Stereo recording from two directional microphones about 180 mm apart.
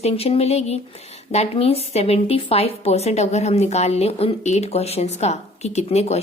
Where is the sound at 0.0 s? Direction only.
35° left (ahead or behind).